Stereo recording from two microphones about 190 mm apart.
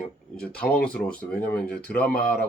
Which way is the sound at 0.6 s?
5° left (ahead or behind).